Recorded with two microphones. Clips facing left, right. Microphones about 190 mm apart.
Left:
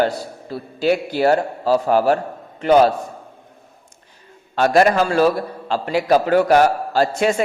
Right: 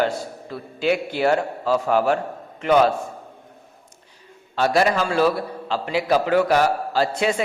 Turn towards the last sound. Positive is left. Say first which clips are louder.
# left 3 dB
turn(degrees=45)  # may be behind; listen again after turning